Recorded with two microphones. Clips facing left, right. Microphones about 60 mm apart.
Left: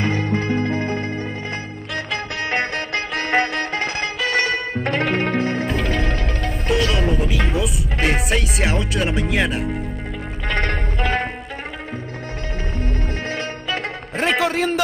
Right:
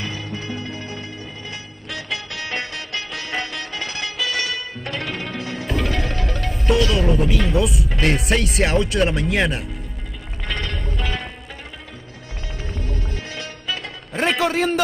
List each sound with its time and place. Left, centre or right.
0.0 s music: left
7.0 s music: centre
7.5 s speech: centre
10.5 s music: left
12.7 s music: left
13.7 s music: centre